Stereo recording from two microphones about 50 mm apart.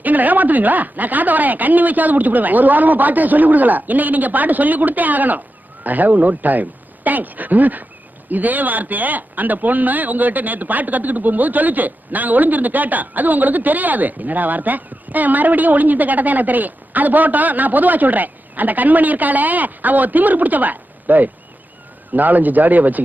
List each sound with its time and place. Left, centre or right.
0.0 s speech: right